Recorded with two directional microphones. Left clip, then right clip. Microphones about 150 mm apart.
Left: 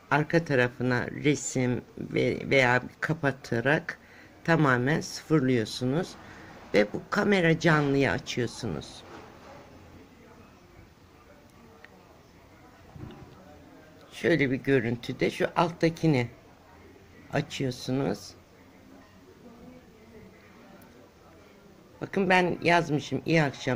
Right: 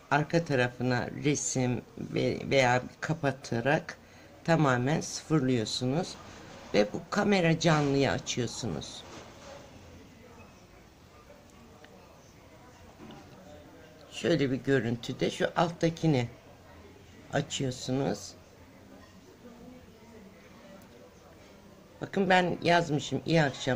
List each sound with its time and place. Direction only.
0.1 s speech: 5° left (ahead or behind)
14.1 s speech: 5° left (ahead or behind)
17.3 s speech: 5° left (ahead or behind)
21.9 s speech: 5° left (ahead or behind)